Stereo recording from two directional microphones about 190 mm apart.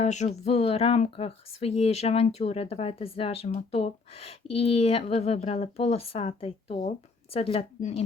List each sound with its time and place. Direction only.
0.0 s speech: 35° left (ahead or behind)